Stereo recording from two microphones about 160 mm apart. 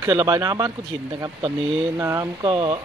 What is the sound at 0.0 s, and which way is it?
Speech, 20° right (ahead or behind).